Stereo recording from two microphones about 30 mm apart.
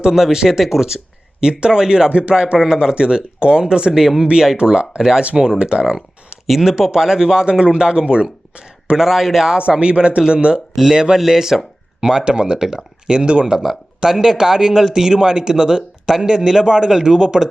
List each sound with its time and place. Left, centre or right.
0.2 s speech: centre
2.0 s a man's voice: right
4.0 s speech: centre
4.5 s a man's voice: right
5.8 s a sound: right
6.5 s a man's voice: centre; by 9.0 s right
9.0 s speech: centre
9.9 s a man's voice: right
11.2 s speech: centre
13.1 s a man's voice: right